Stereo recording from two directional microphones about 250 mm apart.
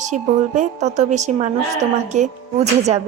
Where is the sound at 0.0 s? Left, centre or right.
Right.